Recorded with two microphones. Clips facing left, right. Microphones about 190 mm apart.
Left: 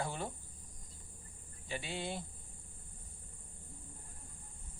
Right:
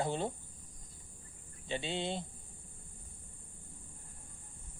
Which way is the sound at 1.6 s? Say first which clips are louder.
Right 4 dB; 25° right (ahead or behind).